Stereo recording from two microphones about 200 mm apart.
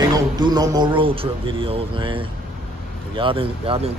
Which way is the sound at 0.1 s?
20° right (ahead or behind).